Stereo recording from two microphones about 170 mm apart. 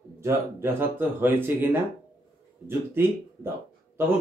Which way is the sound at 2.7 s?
15° right (ahead or behind).